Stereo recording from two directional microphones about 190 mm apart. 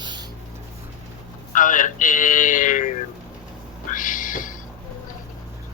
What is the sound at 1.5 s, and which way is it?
Speech, 45° left (ahead or behind).